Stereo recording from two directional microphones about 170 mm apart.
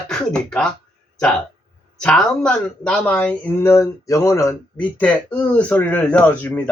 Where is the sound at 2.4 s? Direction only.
5° left (ahead or behind).